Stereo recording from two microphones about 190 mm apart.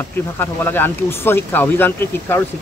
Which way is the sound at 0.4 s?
10° left (ahead or behind).